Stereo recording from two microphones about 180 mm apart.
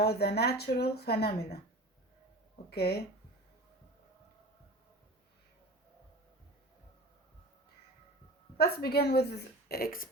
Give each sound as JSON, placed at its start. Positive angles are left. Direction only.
{"t": 0.0, "sound": "speech", "side_deg": 65}
{"t": 2.6, "sound": "speech", "side_deg": 60}
{"t": 8.5, "sound": "speech", "side_deg": 60}